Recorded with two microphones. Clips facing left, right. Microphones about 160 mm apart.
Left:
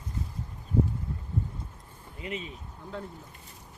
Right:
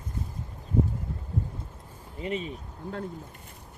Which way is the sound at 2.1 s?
40° right (ahead or behind).